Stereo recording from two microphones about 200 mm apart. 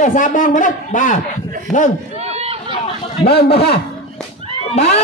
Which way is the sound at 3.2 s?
55° left (ahead or behind).